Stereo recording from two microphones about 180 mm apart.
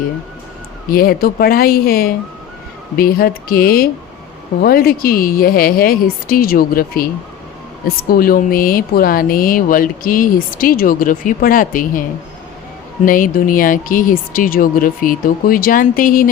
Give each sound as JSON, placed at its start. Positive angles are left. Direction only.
{"t": 0.9, "sound": "speech", "side_deg": 55}
{"t": 13.1, "sound": "speech", "side_deg": 50}